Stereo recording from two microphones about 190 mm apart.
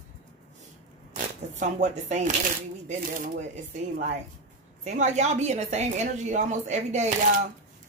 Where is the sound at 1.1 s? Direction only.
40° right (ahead or behind).